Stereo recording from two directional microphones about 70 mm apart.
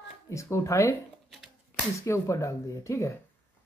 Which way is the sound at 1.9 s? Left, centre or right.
Left.